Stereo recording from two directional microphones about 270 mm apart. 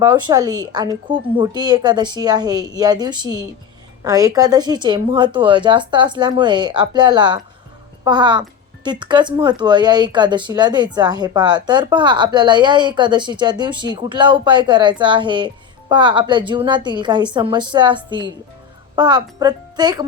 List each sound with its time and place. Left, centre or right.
0.0 s speech: centre